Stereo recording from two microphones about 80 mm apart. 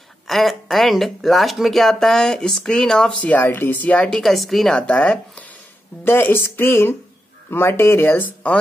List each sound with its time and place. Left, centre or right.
0.3 s speech: centre
3.3 s speech: left
4.2 s speech: centre
4.7 s speech: centre
6.0 s speech: left